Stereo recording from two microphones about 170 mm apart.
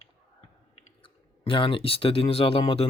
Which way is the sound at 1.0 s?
30° left (ahead or behind).